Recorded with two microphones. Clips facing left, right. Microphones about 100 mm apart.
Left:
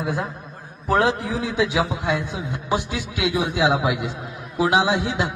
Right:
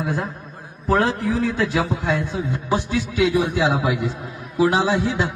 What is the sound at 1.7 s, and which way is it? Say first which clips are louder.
A man's voice: right 1 dB; 10° left (ahead or behind).